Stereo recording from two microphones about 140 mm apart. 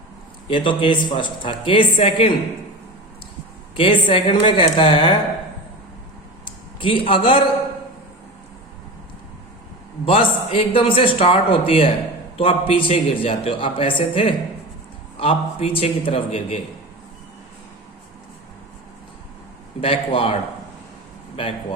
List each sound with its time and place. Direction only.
0.4 s a man's voice: 40° left (ahead or behind)
3.8 s a man's voice: 40° left (ahead or behind)
6.4 s a sound: 40° left (ahead or behind)
10.1 s a man's voice: 40° left (ahead or behind)
19.8 s a man's voice: 40° left (ahead or behind)